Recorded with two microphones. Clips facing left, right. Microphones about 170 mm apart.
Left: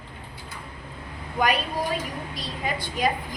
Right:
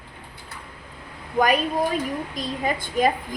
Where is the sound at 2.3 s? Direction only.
50° right (ahead or behind).